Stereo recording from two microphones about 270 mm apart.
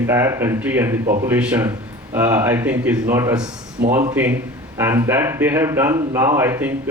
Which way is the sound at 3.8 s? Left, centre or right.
Right.